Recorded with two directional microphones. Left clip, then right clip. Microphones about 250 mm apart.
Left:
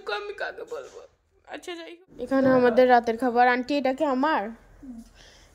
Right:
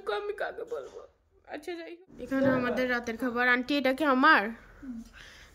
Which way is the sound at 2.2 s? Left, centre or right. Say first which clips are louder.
Left 7 dB; centre.